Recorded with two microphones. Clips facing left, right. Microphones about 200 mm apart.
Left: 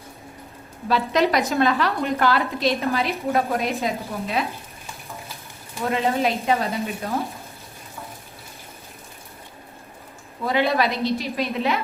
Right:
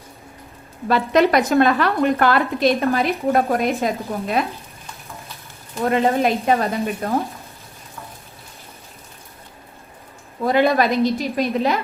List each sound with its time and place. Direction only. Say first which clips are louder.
0.9 s a woman's voice: right 4 dB; 55° right (ahead or behind)
5.8 s speech: right 4 dB; 50° right (ahead or behind)
10.4 s speech: right 4 dB; 50° right (ahead or behind)